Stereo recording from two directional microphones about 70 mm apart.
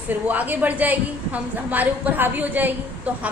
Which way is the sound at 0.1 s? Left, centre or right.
Right.